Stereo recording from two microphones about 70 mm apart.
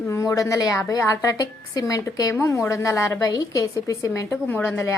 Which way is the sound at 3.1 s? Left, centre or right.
Left.